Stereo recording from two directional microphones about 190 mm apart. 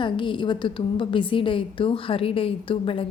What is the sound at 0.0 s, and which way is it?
A woman's voice, 25° left (ahead or behind).